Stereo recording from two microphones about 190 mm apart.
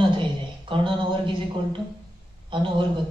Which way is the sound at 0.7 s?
25° right (ahead or behind).